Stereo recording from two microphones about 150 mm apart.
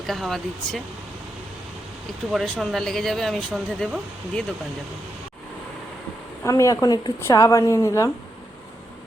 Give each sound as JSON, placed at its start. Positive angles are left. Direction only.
{"t": 0.0, "sound": "speech", "side_deg": 0}
{"t": 2.3, "sound": "speech", "side_deg": 0}
{"t": 6.4, "sound": "speech", "side_deg": 20}